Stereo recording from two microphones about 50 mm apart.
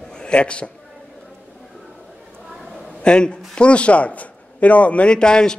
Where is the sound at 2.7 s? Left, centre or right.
Centre.